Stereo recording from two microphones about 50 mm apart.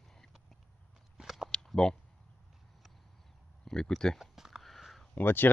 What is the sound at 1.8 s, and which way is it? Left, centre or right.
Speech, centre.